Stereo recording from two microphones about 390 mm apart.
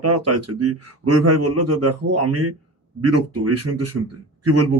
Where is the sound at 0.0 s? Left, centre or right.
Right.